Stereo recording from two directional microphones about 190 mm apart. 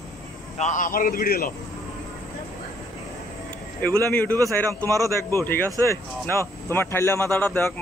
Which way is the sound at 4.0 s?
10° left (ahead or behind).